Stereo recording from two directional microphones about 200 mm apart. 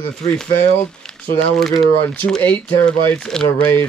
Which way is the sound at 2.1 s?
5° left (ahead or behind).